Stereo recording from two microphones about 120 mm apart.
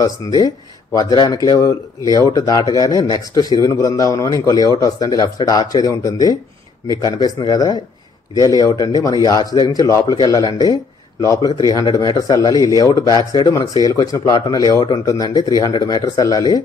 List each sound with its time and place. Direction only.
0.0 s speech: 30° left (ahead or behind)